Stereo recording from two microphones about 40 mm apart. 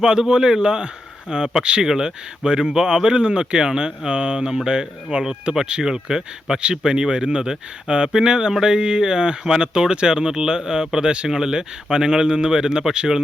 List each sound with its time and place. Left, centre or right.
0.0 s a man's voice: centre